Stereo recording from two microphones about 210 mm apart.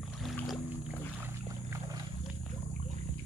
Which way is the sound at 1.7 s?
15° right (ahead or behind).